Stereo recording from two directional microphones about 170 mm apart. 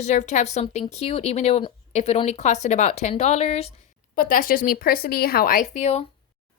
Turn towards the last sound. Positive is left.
turn(degrees=45)  # may be behind; listen again after turning